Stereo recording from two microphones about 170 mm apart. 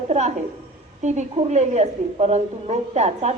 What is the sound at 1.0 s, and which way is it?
A woman's voice, 45° right (ahead or behind).